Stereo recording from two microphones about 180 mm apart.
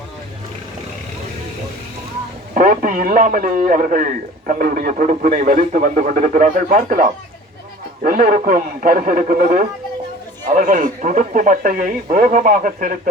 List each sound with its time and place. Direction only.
2.6 s a man's voice: 50° right (ahead or behind)